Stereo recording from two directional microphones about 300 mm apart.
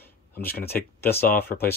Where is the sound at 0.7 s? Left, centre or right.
Centre.